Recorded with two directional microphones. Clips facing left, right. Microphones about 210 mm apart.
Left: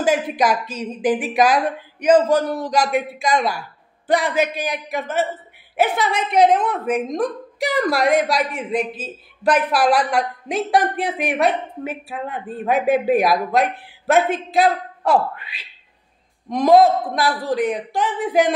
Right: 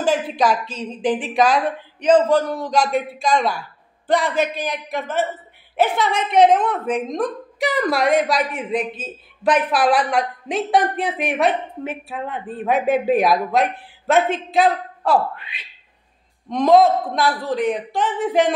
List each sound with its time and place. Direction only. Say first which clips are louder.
0.0 s a woman's voice: even; 10° left (ahead or behind)
6.3 s a woman's voice: right 1 dB; centre (ahead or behind)
16.4 s a woman's voice: left 1 dB; 5° left (ahead or behind)